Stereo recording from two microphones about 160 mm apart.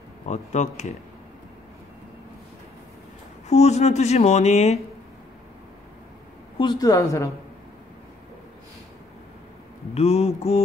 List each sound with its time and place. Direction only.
0.3 s speech: 45° left (ahead or behind)
3.4 s speech: 45° left (ahead or behind)
6.6 s a woman's voice: 25° left (ahead or behind)
9.9 s mantra: 40° left (ahead or behind)